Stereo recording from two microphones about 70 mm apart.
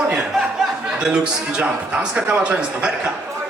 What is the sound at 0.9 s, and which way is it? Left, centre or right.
A man's voice, centre.